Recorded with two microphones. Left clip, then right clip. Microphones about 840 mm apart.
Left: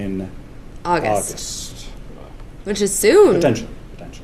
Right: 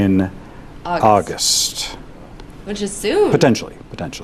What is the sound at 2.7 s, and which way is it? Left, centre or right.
Speech, left.